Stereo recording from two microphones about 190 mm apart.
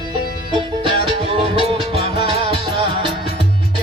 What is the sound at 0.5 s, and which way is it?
Music, 25° right (ahead or behind).